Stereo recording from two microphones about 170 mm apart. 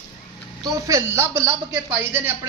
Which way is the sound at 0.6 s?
20° right (ahead or behind).